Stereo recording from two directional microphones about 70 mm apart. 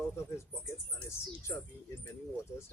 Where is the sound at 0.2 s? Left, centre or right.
Left.